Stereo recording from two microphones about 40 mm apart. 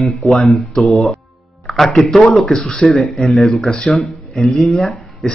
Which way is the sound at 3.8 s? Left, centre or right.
Centre.